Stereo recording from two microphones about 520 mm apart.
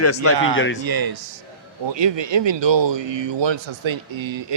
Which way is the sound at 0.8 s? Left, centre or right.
Right.